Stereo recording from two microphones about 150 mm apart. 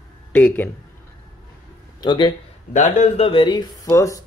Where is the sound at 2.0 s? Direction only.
30° left (ahead or behind).